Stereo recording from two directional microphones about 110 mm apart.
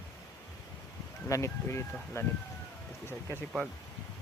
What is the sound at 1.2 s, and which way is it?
Speech, 30° left (ahead or behind).